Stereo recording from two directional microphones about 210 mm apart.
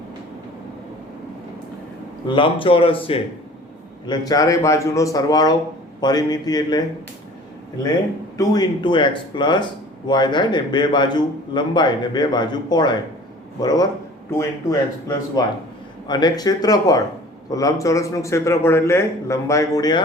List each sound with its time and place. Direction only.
2.2 s a man's voice: 25° left (ahead or behind)
8.4 s a man's voice: 20° left (ahead or behind)